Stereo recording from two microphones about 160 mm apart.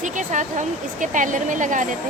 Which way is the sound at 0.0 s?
50° right (ahead or behind).